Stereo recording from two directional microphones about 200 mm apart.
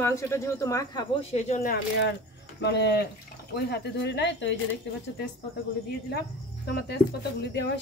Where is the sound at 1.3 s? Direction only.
35° left (ahead or behind).